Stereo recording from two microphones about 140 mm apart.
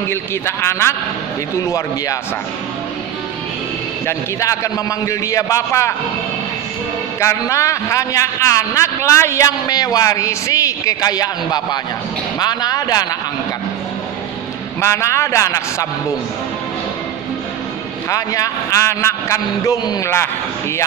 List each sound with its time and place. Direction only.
0.1 s a man's voice: 20° left (ahead or behind)
4.0 s a man's voice: 20° left (ahead or behind)
7.2 s a man's voice: 20° left (ahead or behind)
14.8 s a man's voice: 20° left (ahead or behind)
18.1 s a man's voice: 25° left (ahead or behind)